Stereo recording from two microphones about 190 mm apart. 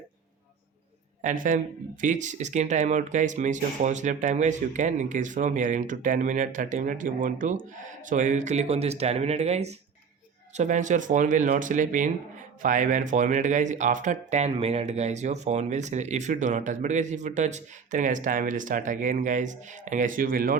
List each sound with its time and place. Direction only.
1.2 s speech: 40° right (ahead or behind)